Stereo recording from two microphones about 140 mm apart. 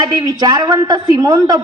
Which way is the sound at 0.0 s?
30° right (ahead or behind).